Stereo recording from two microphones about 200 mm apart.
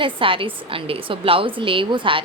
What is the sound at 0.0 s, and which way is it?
A woman's voice, 25° right (ahead or behind).